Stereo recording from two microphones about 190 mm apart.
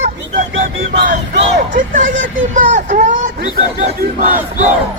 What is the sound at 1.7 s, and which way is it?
Speech, 45° right (ahead or behind).